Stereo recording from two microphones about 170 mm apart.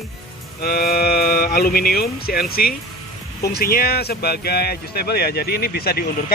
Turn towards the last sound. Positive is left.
turn(degrees=65)  # may be behind; listen again after turning